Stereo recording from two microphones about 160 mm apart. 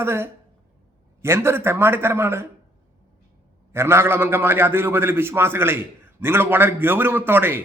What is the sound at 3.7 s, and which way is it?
A man's voice, 15° right (ahead or behind).